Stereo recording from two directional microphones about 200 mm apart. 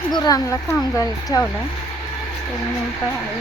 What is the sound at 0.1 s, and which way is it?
Speech, 20° left (ahead or behind).